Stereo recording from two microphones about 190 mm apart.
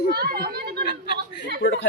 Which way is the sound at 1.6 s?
75° left (ahead or behind).